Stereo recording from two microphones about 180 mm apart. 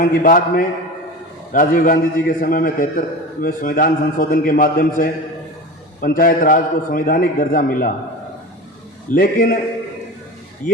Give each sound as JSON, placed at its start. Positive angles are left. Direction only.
{"t": 0.0, "sound": "a man's voice", "side_deg": 50}
{"t": 9.0, "sound": "a man's voice", "side_deg": 55}